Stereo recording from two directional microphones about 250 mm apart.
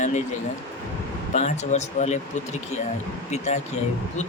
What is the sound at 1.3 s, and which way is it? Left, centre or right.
Speech, left.